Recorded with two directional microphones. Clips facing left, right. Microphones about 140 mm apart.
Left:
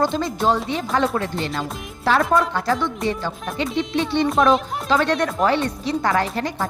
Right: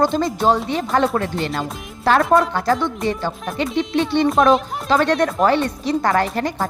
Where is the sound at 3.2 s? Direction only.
50° right (ahead or behind).